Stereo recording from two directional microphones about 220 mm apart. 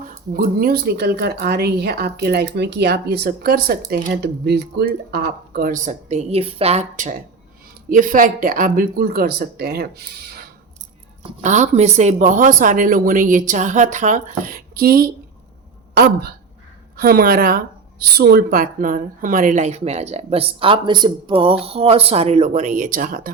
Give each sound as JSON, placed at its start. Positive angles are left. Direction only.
{"t": 0.0, "sound": "a woman's voice", "side_deg": -40}
{"t": 11.4, "sound": "speech", "side_deg": -30}
{"t": 17.0, "sound": "a woman's voice", "side_deg": -45}